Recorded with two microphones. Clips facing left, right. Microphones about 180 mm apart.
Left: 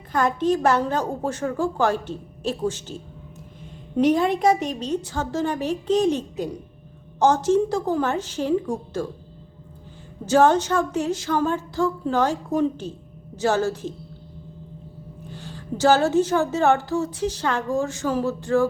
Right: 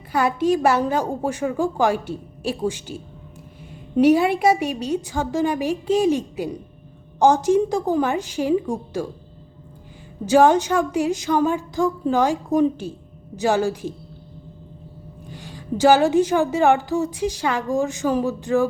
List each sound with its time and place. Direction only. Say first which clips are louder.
0.1 s a woman's voice: right 2 dB; 10° right (ahead or behind)
10.2 s a woman's voice: right 2 dB; 10° right (ahead or behind)
15.3 s a woman's voice: right 4 dB; 15° right (ahead or behind)